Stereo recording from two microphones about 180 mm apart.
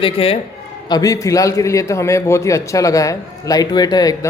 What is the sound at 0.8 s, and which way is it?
A man's voice, 20° left (ahead or behind).